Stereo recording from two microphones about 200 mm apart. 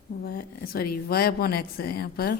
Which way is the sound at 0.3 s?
50° left (ahead or behind).